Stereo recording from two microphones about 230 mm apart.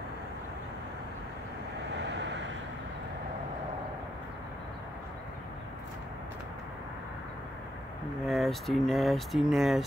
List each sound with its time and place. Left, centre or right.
2.0 s vehicle: right
8.3 s speech: centre